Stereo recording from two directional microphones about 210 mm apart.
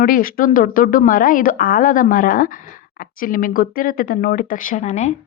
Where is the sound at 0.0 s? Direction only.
40° left (ahead or behind).